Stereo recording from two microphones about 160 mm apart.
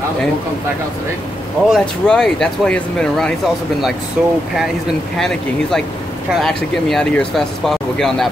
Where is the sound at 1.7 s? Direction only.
5° left (ahead or behind).